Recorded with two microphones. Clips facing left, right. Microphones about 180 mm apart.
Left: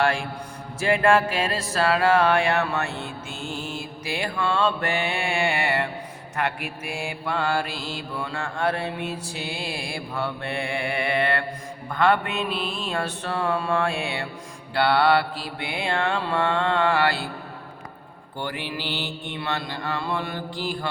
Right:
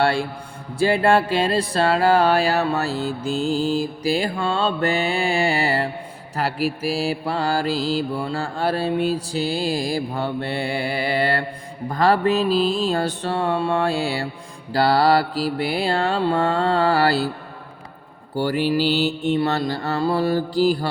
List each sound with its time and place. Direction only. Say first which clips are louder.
0.0 s music: right 3 dB; 35° right (ahead or behind)
18.3 s music: right 11 dB; 40° right (ahead or behind)